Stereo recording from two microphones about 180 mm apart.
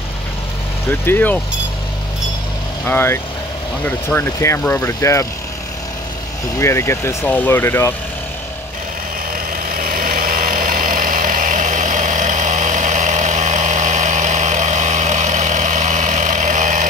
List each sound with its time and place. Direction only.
1.0 s speech: 10° left (ahead or behind)
2.9 s speech: 10° left (ahead or behind)
6.6 s speech: 15° left (ahead or behind)
9.7 s vehicle: 50° right (ahead or behind)